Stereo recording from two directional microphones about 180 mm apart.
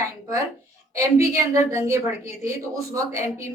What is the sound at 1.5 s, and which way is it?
A woman's voice, 15° right (ahead or behind).